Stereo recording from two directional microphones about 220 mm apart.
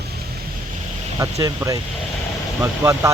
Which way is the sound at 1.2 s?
15° right (ahead or behind).